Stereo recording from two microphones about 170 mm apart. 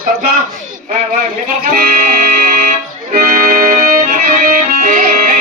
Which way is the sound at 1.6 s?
60° right (ahead or behind).